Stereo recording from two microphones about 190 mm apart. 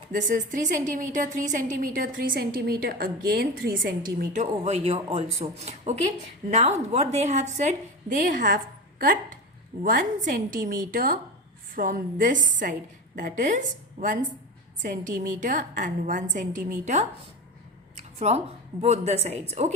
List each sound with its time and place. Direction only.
0.1 s a woman's voice: 40° right (ahead or behind)